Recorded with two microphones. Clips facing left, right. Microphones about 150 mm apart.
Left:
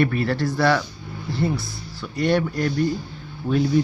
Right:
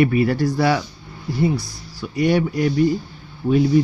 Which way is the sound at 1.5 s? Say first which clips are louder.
Right 2 dB; 40° right (ahead or behind).